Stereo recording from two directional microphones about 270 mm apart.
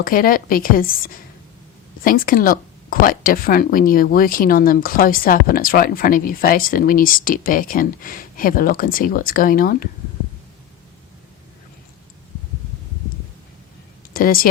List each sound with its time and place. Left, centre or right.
0.0 s a woman's voice: left
14.1 s speech: left